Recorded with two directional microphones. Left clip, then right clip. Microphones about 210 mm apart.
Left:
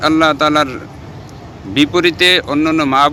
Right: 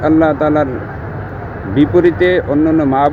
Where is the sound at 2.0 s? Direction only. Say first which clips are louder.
Left 1 dB; 65° left (ahead or behind).